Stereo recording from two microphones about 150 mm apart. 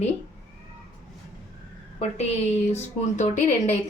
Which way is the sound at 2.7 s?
55° left (ahead or behind).